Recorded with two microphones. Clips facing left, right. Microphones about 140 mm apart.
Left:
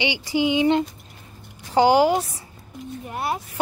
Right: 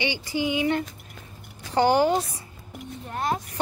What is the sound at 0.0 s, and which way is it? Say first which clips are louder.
Speech: left 4 dB; 20° left (ahead or behind).